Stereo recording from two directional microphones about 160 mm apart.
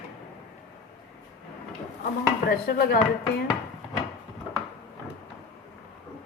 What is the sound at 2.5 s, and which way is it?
Speech, 75° left (ahead or behind).